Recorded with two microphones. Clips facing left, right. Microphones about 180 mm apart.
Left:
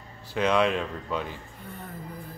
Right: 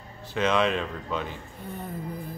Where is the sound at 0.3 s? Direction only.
10° left (ahead or behind).